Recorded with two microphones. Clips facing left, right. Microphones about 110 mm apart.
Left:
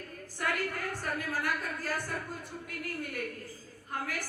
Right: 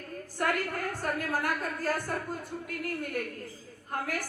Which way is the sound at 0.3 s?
50° right (ahead or behind).